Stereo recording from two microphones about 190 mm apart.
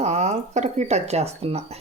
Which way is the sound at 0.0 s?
35° right (ahead or behind).